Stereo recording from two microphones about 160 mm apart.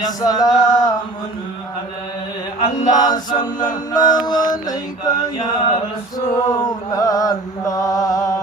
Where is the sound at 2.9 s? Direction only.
25° left (ahead or behind).